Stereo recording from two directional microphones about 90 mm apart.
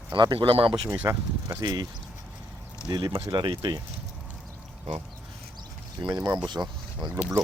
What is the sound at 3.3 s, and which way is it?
Speech, 60° right (ahead or behind).